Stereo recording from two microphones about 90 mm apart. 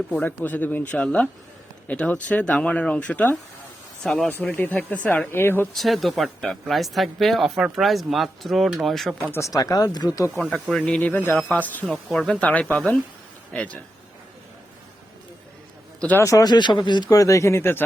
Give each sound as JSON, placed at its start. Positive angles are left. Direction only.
{"t": 0.1, "sound": "speech", "side_deg": 20}
{"t": 4.5, "sound": "speech", "side_deg": 20}
{"t": 5.7, "sound": "speech", "side_deg": 0}
{"t": 9.3, "sound": "speech", "side_deg": 35}
{"t": 10.5, "sound": "speech", "side_deg": 5}
{"t": 12.1, "sound": "speech", "side_deg": 5}
{"t": 12.5, "sound": "speech", "side_deg": 15}
{"t": 16.1, "sound": "speech", "side_deg": 35}
{"t": 17.1, "sound": "speech", "side_deg": 40}